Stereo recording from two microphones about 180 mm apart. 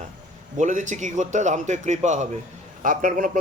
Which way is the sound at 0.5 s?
45° right (ahead or behind).